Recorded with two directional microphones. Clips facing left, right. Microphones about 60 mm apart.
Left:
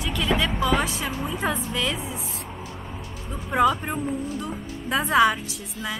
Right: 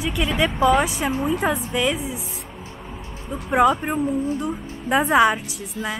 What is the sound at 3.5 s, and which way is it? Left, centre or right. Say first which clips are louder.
A woman's voice: right 3 dB; centre.